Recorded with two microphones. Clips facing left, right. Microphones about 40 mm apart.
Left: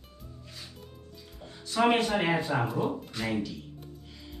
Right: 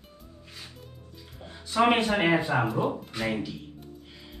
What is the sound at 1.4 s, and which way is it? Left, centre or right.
Speech, centre.